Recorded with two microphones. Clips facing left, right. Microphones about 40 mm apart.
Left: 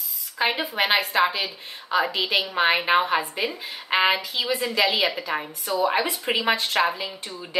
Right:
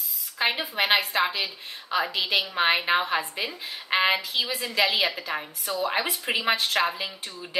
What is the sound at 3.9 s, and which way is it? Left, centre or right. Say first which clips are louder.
Speech: left 2 dB; centre.